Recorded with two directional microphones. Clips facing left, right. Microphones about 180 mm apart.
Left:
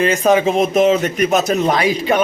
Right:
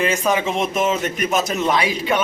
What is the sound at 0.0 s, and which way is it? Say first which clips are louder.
A man's voice: left 6 dB; 40° left (ahead or behind).